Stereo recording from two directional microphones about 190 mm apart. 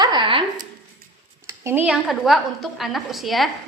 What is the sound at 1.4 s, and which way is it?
A woman's voice, 15° right (ahead or behind).